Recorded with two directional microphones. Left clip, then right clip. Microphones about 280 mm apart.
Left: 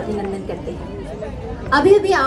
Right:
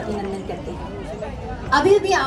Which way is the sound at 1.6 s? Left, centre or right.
Centre.